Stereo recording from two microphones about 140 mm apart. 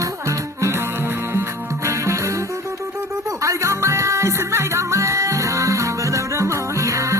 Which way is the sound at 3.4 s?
20° right (ahead or behind).